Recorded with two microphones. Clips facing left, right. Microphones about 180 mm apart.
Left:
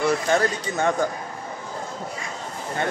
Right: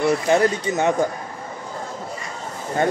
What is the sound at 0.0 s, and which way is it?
Speech, 20° right (ahead or behind).